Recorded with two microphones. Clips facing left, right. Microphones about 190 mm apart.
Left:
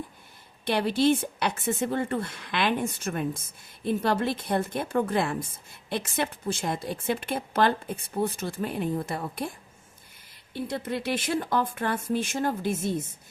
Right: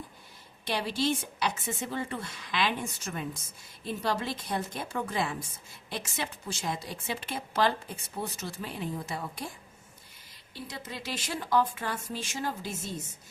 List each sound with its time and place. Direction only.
0.6 s a woman's voice: 55° left (ahead or behind)
10.5 s a woman's voice: 55° left (ahead or behind)